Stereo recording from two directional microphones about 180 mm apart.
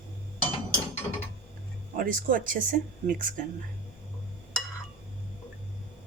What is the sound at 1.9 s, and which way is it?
Speech, 50° right (ahead or behind).